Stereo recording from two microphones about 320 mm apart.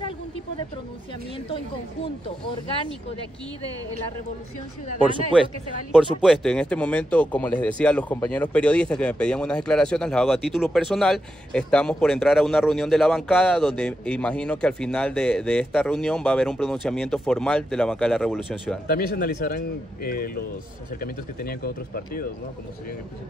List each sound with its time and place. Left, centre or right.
6.2 s speech: centre
18.9 s a man's voice: left